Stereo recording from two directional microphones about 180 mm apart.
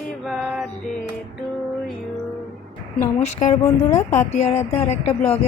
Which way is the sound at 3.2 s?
40° left (ahead or behind).